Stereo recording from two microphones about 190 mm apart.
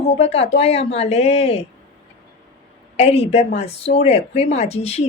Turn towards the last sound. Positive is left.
turn(degrees=35)  # may be behind; listen again after turning